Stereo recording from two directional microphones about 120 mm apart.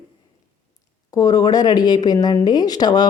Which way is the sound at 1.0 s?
30° left (ahead or behind).